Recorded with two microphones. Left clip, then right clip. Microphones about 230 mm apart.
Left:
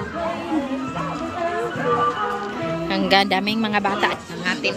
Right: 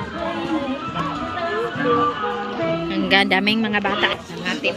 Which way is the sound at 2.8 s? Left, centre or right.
Centre.